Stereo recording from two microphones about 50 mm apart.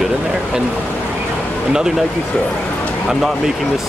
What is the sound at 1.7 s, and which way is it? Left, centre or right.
Speech, centre.